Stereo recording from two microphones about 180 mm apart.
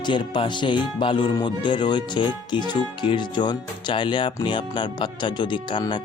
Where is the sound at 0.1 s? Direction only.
25° left (ahead or behind).